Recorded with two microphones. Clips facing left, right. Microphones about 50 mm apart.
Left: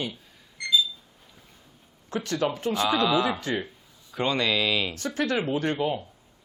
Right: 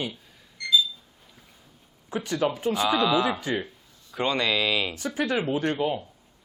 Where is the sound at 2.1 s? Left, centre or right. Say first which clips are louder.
Right 1 dB; centre.